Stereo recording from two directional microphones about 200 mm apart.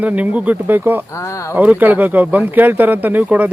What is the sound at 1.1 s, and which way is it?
Speech, 15° left (ahead or behind).